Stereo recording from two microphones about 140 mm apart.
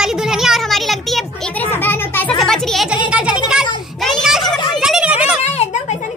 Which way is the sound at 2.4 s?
5° left (ahead or behind).